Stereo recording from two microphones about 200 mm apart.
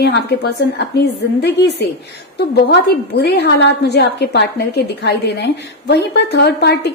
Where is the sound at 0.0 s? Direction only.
55° left (ahead or behind).